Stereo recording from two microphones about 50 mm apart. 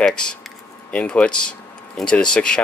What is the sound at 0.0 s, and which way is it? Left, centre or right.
Speech, centre.